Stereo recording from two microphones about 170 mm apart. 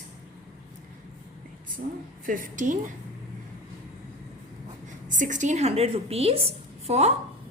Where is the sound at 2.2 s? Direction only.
55° right (ahead or behind).